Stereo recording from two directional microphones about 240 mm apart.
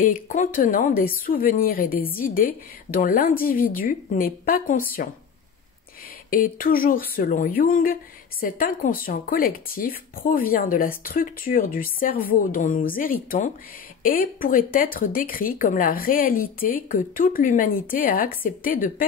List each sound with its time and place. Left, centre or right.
0.0 s speech: left
6.3 s speech: left